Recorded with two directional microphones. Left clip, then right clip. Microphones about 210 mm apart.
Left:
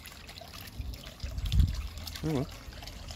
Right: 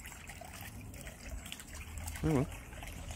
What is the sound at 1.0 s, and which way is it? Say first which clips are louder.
Water: left 4 dB; 45° left (ahead or behind).